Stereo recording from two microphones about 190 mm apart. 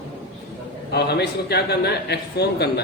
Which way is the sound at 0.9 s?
60° left (ahead or behind).